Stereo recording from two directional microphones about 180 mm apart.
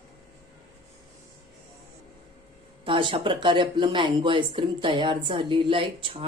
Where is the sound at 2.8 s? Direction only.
30° right (ahead or behind).